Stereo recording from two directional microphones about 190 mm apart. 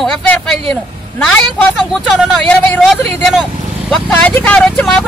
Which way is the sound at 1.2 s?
Centre (ahead or behind).